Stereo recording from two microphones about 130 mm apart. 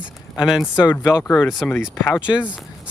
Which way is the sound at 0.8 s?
15° left (ahead or behind).